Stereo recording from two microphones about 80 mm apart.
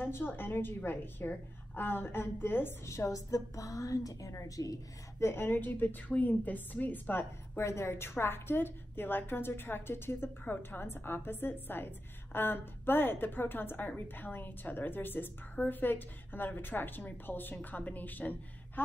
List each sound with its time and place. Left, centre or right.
0.0 s a woman's voice: left
5.2 s a woman's voice: left